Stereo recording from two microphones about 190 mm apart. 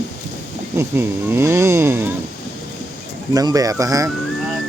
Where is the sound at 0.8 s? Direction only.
15° right (ahead or behind).